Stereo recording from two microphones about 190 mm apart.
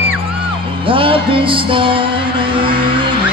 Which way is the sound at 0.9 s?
25° right (ahead or behind).